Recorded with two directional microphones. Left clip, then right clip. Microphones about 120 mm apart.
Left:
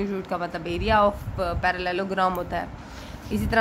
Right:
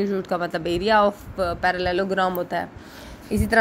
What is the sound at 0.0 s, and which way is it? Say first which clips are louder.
A woman's voice: right 4 dB; 35° right (ahead or behind).